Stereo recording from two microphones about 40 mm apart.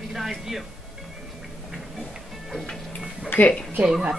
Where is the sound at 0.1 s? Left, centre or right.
Centre.